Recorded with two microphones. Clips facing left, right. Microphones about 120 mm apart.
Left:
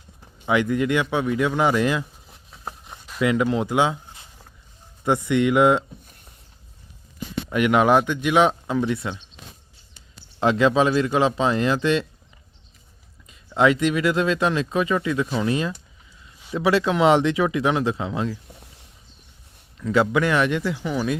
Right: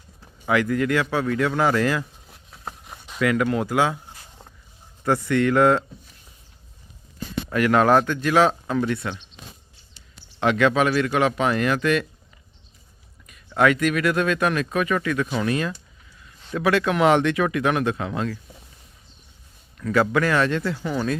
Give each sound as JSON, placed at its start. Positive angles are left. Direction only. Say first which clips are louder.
{"t": 0.4, "sound": "speech", "louder": "even", "side_deg": 20}
{"t": 2.2, "sound": "a sound", "louder": "left 1 dB", "side_deg": 0}
{"t": 3.2, "sound": "speech", "louder": "left 1 dB", "side_deg": 20}
{"t": 7.5, "sound": "speech", "louder": "even", "side_deg": 15}
{"t": 10.4, "sound": "speech", "louder": "left 1 dB", "side_deg": 30}
{"t": 13.6, "sound": "speech", "louder": "left 1 dB", "side_deg": 25}
{"t": 19.9, "sound": "speech", "louder": "even", "side_deg": 20}